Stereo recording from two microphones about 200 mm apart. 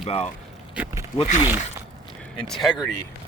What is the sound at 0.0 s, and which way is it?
Speech, 30° left (ahead or behind).